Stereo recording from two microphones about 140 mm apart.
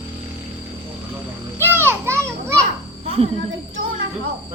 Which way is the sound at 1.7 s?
15° right (ahead or behind).